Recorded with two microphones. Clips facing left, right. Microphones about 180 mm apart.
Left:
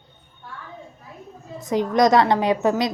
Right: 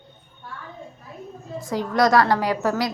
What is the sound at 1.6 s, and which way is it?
A woman's voice, 20° left (ahead or behind).